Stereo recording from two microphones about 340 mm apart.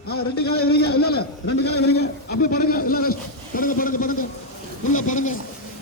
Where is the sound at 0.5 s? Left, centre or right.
Left.